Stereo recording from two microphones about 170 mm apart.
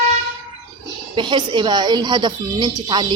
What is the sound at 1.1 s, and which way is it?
Speech, 25° right (ahead or behind).